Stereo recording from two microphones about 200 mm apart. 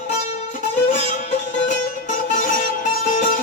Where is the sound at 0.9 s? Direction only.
40° left (ahead or behind).